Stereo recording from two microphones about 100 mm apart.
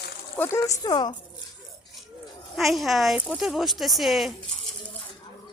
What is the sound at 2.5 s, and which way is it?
Speech, centre (ahead or behind).